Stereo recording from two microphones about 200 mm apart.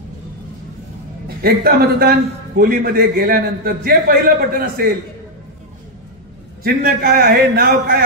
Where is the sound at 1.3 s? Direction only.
50° right (ahead or behind).